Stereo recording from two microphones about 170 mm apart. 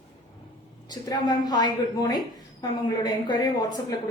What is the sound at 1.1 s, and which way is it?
A woman's voice, 25° left (ahead or behind).